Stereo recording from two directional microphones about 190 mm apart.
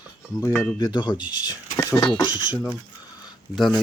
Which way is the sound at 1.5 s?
20° left (ahead or behind).